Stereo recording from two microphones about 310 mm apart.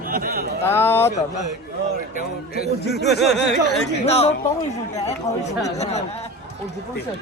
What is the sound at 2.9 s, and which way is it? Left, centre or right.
Speech, centre.